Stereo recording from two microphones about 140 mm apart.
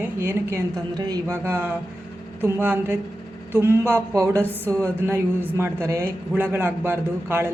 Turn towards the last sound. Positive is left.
turn(degrees=-15)  # may be behind; listen again after turning